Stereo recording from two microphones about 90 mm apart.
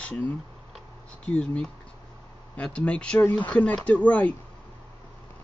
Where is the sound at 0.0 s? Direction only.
15° left (ahead or behind).